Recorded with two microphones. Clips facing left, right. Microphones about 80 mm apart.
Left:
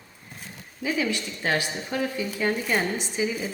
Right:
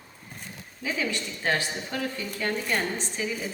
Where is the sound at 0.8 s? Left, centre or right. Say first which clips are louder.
Left 3 dB; centre.